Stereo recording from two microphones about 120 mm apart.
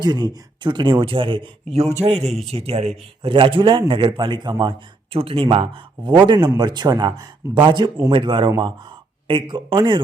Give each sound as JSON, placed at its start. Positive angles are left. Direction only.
{"t": 0.0, "sound": "speech", "side_deg": -35}
{"t": 2.0, "sound": "a man's voice", "side_deg": -65}
{"t": 3.3, "sound": "a man's voice", "side_deg": -45}
{"t": 5.1, "sound": "a man's voice", "side_deg": -50}